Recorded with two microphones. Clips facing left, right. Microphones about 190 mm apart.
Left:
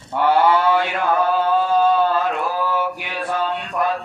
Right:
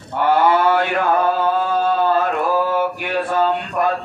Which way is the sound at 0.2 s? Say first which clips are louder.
Right 1 dB; 50° right (ahead or behind).